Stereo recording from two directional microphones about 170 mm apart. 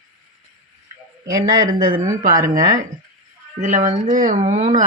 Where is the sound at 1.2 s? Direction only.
20° right (ahead or behind).